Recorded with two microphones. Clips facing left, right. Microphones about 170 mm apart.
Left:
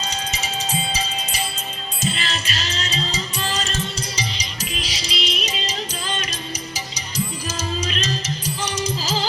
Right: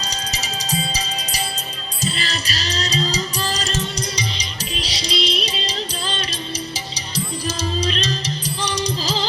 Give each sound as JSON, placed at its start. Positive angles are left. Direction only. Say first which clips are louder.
{"t": 2.0, "sound": "music", "louder": "even", "side_deg": -35}
{"t": 7.4, "sound": "music", "louder": "right 3 dB", "side_deg": -35}